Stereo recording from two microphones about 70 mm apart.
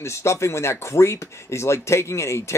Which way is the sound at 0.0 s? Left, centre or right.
Left.